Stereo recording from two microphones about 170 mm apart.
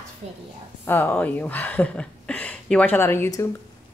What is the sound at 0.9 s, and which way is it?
A child's voice, 10° left (ahead or behind).